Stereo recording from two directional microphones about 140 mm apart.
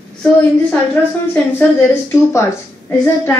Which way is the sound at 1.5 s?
20° left (ahead or behind).